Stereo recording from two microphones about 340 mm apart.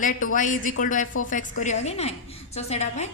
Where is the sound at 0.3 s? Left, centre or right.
Left.